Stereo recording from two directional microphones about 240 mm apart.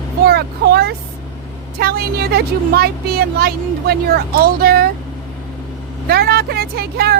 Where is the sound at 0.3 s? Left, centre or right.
Right.